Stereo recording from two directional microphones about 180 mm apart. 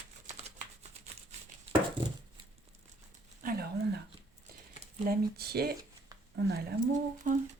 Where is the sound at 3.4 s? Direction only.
55° right (ahead or behind).